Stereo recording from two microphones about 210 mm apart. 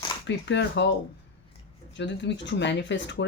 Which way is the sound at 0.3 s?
60° left (ahead or behind).